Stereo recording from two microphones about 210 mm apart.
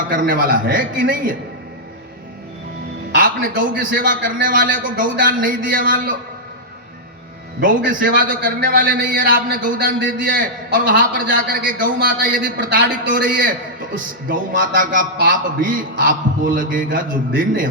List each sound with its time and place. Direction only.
0.1 s a man's voice: 40° right (ahead or behind)
3.2 s a man's voice: 40° right (ahead or behind)
7.9 s a man's voice: 40° right (ahead or behind)